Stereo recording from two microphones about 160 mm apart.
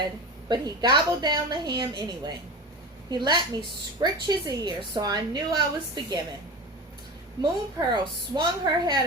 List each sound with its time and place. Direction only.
0.4 s a woman's voice: 25° right (ahead or behind)
7.4 s a woman's voice: 30° right (ahead or behind)